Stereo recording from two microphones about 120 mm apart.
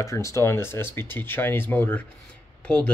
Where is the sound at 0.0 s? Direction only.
25° left (ahead or behind).